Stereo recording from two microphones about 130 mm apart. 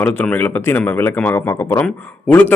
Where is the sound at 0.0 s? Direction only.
10° left (ahead or behind).